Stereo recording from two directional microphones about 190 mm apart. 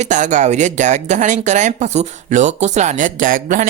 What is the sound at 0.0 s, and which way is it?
Speech, 40° right (ahead or behind).